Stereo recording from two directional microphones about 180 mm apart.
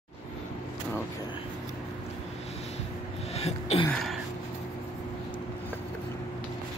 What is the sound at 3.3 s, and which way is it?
Throat clearing, 35° left (ahead or behind).